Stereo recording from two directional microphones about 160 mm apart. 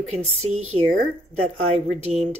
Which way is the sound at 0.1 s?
40° right (ahead or behind).